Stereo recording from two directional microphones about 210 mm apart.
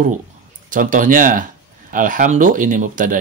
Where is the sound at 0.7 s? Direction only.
40° right (ahead or behind).